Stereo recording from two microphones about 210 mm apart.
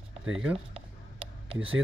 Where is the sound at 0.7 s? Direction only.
25° right (ahead or behind).